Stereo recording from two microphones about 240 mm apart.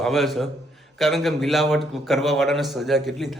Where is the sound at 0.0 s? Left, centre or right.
Centre.